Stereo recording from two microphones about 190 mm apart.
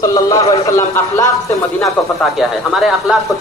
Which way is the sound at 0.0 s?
20° left (ahead or behind).